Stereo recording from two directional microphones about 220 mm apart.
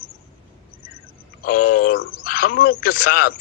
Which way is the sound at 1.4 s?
40° left (ahead or behind).